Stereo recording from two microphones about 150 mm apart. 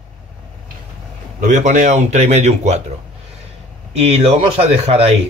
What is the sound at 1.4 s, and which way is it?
Speech, 55° right (ahead or behind).